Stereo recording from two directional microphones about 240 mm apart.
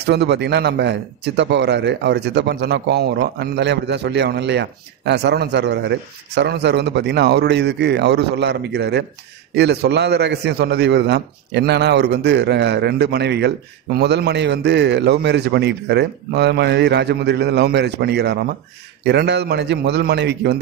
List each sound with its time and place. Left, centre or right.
0.0 s a man's voice: right